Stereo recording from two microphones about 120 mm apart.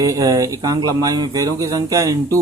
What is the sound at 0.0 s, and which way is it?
Speech, 30° right (ahead or behind).